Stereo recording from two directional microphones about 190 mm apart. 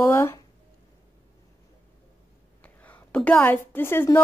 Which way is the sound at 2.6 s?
10° left (ahead or behind).